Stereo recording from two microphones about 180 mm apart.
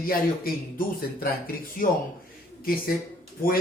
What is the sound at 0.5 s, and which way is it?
Speech, 55° left (ahead or behind).